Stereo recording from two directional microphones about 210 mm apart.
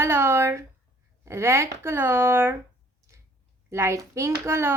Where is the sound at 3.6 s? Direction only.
15° right (ahead or behind).